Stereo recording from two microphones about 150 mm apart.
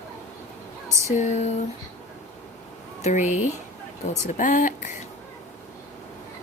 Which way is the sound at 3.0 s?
55° left (ahead or behind).